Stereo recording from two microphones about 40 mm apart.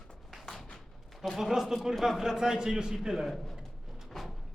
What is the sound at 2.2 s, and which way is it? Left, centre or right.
Speech, centre.